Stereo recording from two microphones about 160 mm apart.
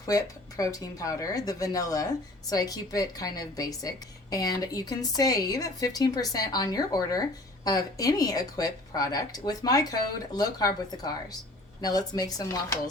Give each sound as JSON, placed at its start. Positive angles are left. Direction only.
{"t": 0.0, "sound": "a woman's voice", "side_deg": 20}